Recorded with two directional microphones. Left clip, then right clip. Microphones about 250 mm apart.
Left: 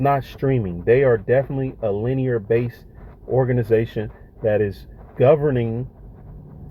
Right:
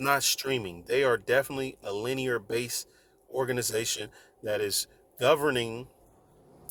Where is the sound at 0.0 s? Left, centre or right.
Centre.